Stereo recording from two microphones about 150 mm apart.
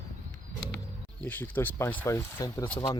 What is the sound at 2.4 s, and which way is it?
Speech, 30° left (ahead or behind).